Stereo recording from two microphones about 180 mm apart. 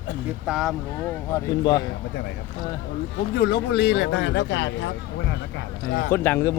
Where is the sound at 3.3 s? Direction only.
60° left (ahead or behind); by 4.9 s 80° left.